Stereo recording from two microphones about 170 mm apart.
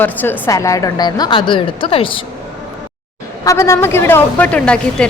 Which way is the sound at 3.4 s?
15° left (ahead or behind).